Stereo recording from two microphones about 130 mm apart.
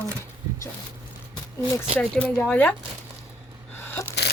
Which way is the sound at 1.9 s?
10° left (ahead or behind).